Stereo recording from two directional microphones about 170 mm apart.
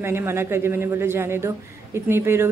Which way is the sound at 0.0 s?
15° right (ahead or behind).